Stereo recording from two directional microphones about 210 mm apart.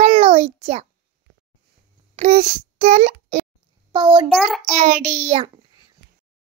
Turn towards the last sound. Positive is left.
turn(degrees=-35)  # may be behind; listen again after turning